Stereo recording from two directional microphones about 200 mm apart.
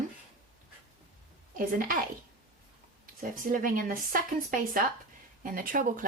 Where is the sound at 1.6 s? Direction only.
45° right (ahead or behind).